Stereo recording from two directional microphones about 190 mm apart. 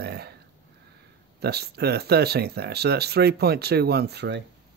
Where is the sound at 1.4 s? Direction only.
60° right (ahead or behind).